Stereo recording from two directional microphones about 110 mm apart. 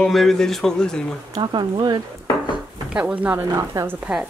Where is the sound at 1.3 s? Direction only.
40° right (ahead or behind).